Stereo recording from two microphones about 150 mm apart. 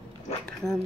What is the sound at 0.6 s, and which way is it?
Speech, 20° right (ahead or behind).